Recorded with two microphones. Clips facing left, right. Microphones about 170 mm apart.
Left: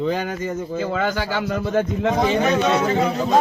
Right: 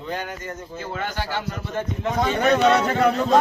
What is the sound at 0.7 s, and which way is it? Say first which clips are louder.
A man's voice: left 7 dB; 90° left.